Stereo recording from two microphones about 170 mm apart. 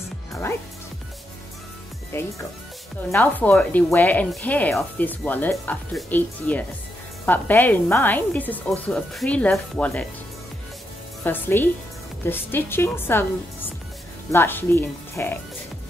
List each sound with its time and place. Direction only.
2.1 s speech: 15° left (ahead or behind)
11.2 s speech: 10° left (ahead or behind)